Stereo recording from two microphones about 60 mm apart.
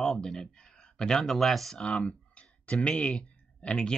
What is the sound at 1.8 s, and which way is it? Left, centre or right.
Speech, centre.